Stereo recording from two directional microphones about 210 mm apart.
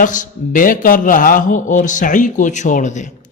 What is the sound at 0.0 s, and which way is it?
A man's voice, 35° left (ahead or behind).